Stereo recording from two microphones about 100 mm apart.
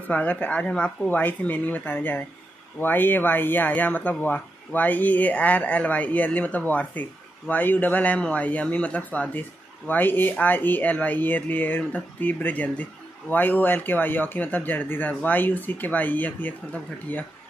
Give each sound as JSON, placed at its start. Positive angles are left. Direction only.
{"t": 0.1, "sound": "speech", "side_deg": 15}